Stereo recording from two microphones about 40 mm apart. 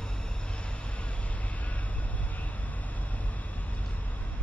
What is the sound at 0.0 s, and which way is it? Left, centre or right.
Vehicle, left.